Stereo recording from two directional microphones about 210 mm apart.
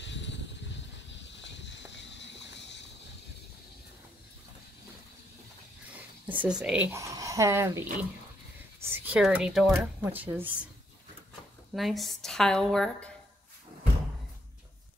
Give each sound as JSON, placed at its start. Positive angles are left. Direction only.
{"t": 0.0, "sound": "a sound", "side_deg": 55}
{"t": 6.2, "sound": "speech", "side_deg": -5}
{"t": 11.7, "sound": "a woman's voice", "side_deg": 0}